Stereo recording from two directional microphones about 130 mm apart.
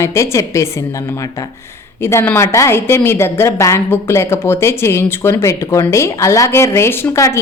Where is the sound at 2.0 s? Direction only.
20° left (ahead or behind).